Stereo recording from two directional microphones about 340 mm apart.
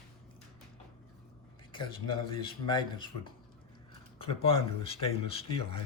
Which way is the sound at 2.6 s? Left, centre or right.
Centre.